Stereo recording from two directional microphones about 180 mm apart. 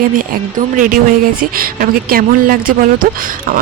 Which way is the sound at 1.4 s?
55° right (ahead or behind).